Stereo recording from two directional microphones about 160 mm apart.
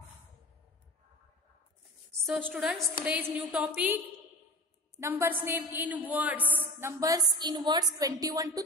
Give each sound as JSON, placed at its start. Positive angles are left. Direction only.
{"t": 2.2, "sound": "a woman's voice", "side_deg": 0}
{"t": 5.0, "sound": "a woman's voice", "side_deg": -15}